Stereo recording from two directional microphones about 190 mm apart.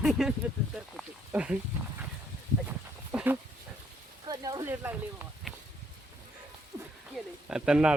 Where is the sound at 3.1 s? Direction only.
10° right (ahead or behind).